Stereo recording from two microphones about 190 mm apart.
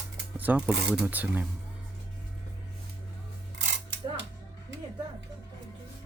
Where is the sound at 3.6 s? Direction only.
70° right (ahead or behind).